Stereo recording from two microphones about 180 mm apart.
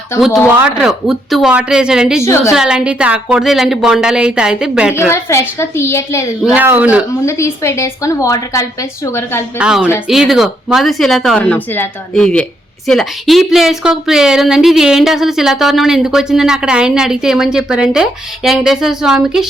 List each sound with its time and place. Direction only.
0.2 s a woman's voice: centre (ahead or behind)
2.2 s a woman's voice: 15° left (ahead or behind)
2.5 s a woman's voice: 5° right (ahead or behind)
4.9 s a woman's voice: 15° left (ahead or behind)
6.4 s speech: 10° right (ahead or behind)
7.3 s a woman's voice: 15° left (ahead or behind)
9.6 s a woman's voice: 5° right (ahead or behind)